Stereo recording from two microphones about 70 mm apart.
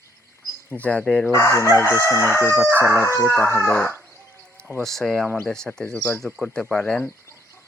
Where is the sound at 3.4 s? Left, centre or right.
Left.